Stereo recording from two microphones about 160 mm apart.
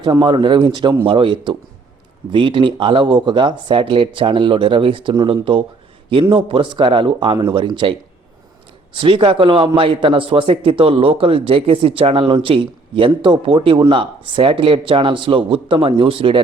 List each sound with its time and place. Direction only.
0.0 s speech: 30° right (ahead or behind)
9.0 s speech: 35° right (ahead or behind)